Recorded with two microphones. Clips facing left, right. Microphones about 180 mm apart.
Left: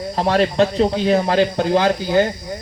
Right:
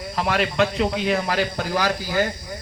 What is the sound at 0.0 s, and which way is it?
Speech, 35° left (ahead or behind).